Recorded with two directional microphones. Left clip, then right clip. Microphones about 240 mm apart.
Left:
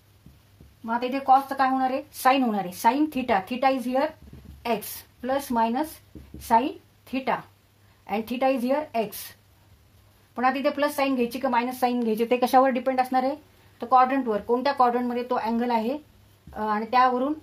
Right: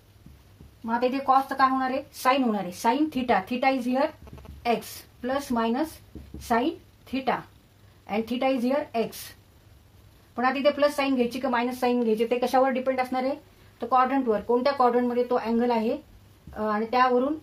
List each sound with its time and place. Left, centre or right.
0.8 s speech: left
8.1 s speech: left
10.3 s speech: left